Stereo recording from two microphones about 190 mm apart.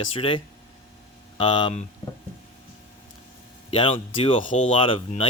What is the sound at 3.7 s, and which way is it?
Speech, 30° left (ahead or behind).